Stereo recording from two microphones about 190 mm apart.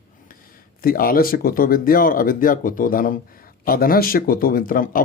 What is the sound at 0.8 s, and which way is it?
Speech, 50° left (ahead or behind).